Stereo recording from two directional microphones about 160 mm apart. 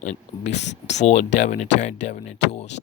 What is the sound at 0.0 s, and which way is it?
Speech, 45° left (ahead or behind).